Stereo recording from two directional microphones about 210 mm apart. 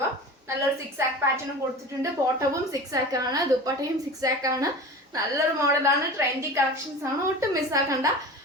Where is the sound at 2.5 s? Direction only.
15° right (ahead or behind).